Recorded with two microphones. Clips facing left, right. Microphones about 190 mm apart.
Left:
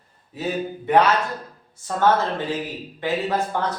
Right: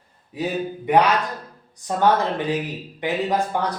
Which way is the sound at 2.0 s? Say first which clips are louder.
Even; 15° right (ahead or behind).